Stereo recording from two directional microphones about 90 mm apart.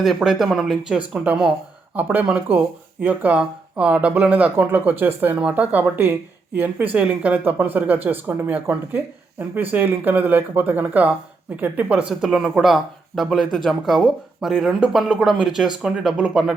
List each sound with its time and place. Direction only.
0.0 s speech: centre (ahead or behind)